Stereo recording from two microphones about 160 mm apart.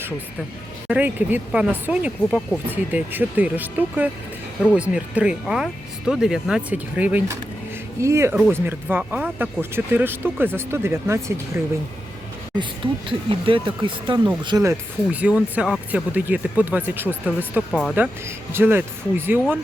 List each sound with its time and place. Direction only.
0.9 s speech: 10° right (ahead or behind)
12.5 s speech: 35° right (ahead or behind); by 17.6 s 10° right (ahead or behind)
17.7 s speech: 5° left (ahead or behind)
17.9 s speech: 15° right (ahead or behind)